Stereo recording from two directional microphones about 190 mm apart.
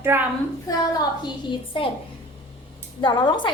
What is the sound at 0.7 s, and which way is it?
A woman's voice, 20° left (ahead or behind).